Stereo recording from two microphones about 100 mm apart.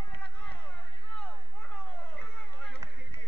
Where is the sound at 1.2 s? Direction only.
10° left (ahead or behind).